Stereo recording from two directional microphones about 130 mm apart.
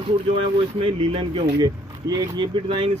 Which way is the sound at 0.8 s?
45° right (ahead or behind).